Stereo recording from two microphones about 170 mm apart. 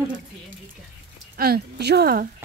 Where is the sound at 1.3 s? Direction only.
65° right (ahead or behind).